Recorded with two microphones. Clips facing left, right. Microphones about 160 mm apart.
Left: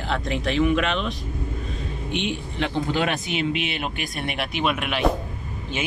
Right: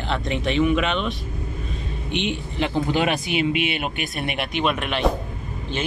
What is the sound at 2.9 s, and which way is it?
Speech, 10° right (ahead or behind).